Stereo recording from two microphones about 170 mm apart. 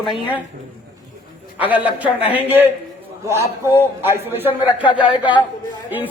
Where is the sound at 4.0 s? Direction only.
15° right (ahead or behind).